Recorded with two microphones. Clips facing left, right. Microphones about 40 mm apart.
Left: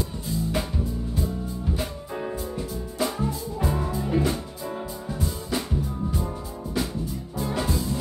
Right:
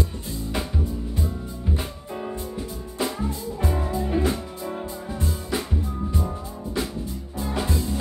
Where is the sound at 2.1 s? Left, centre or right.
Centre.